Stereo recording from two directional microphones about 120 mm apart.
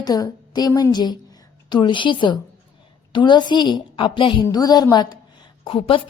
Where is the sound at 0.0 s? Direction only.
35° left (ahead or behind).